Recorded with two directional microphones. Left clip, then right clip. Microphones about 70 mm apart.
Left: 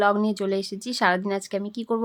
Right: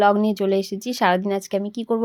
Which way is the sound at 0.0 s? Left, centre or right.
Right.